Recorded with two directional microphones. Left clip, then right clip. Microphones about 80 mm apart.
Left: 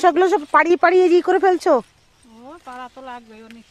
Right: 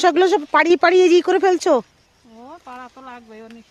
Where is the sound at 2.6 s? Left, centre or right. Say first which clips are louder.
Left 4 dB; right.